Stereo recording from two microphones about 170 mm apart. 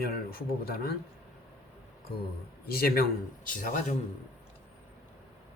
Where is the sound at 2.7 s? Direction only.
60° left (ahead or behind).